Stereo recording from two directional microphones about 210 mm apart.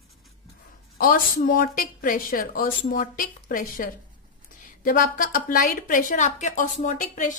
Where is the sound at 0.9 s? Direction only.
40° left (ahead or behind).